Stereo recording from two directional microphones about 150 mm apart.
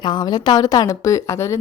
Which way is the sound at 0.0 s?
30° left (ahead or behind).